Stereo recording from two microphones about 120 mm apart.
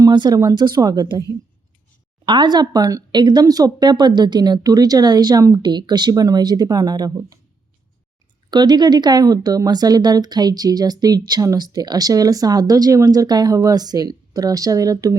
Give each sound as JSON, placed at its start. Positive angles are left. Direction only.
{"t": 0.0, "sound": "speech", "side_deg": -35}
{"t": 2.2, "sound": "speech", "side_deg": -40}
{"t": 8.4, "sound": "speech", "side_deg": -35}